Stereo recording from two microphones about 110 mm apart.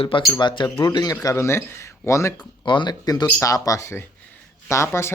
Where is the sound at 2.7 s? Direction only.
45° left (ahead or behind).